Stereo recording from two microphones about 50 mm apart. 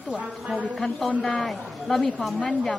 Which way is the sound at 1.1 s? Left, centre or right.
Left.